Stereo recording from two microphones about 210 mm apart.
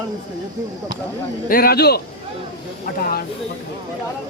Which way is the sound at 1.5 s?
45° left (ahead or behind).